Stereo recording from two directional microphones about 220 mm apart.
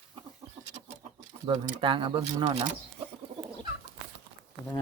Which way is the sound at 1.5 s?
20° right (ahead or behind).